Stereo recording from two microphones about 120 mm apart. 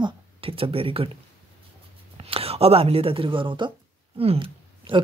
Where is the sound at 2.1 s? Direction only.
55° right (ahead or behind).